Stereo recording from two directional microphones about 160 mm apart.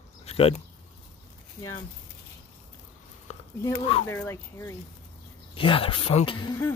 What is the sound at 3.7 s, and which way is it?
Speech, 30° left (ahead or behind).